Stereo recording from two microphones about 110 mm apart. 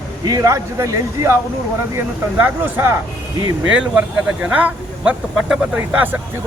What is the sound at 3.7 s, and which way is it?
Speech, 10° right (ahead or behind).